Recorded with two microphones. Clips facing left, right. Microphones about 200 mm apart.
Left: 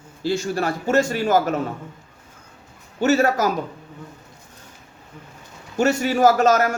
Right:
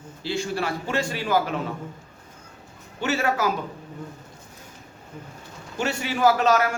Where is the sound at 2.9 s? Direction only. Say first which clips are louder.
Left 6 dB; 40° left (ahead or behind).